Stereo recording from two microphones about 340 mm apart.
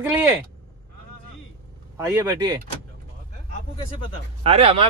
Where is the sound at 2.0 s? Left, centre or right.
Centre.